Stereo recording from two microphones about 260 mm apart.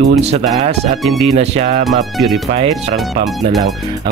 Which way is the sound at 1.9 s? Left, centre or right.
Centre.